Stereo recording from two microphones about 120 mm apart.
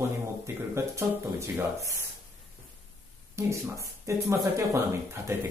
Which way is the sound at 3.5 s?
25° right (ahead or behind).